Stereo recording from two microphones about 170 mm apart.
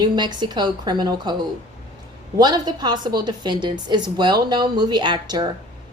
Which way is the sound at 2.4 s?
25° right (ahead or behind).